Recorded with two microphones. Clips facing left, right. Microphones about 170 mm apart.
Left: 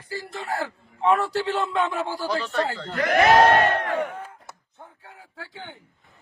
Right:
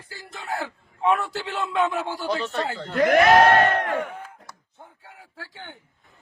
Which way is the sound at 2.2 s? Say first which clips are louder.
Even; 25° right (ahead or behind).